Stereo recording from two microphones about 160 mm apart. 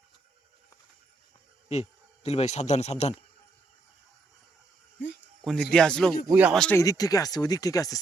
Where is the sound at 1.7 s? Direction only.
40° left (ahead or behind).